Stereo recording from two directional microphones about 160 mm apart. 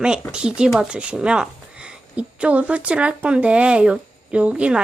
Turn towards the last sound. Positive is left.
turn(degrees=-5)  # may be behind; listen again after turning